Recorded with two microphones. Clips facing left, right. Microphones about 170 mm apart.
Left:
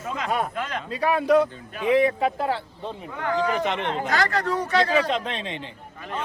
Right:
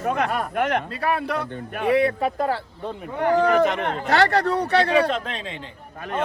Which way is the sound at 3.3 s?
60° right (ahead or behind).